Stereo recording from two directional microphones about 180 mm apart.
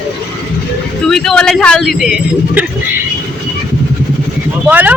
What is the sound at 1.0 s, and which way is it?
Speech, centre (ahead or behind).